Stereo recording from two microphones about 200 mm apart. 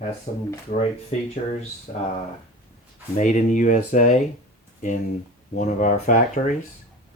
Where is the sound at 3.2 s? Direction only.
40° left (ahead or behind).